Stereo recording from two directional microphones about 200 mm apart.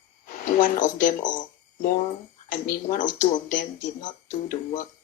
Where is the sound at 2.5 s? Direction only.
40° left (ahead or behind).